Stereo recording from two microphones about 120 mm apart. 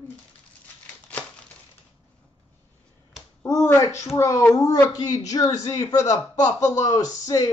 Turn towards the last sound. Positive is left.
turn(degrees=30)  # may be behind; listen again after turning